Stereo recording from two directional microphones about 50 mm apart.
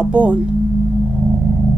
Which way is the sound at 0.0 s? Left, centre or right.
Right.